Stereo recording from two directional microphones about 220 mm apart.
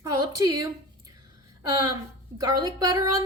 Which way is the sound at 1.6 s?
15° right (ahead or behind).